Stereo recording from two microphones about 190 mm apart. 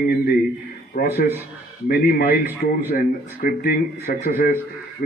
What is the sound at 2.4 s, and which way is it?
Speech, 10° right (ahead or behind).